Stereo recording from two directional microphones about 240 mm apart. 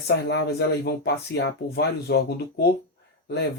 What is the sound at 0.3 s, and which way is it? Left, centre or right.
Speech, left.